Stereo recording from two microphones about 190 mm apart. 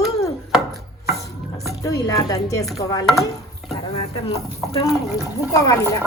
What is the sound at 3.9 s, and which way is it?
Speech, 30° left (ahead or behind).